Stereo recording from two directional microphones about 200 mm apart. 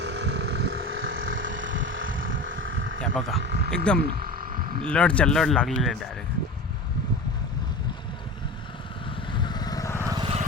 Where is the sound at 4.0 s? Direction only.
45° right (ahead or behind).